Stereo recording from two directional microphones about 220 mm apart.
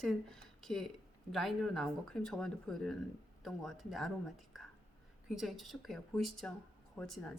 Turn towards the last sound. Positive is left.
turn(degrees=0)  # may be behind; listen again after turning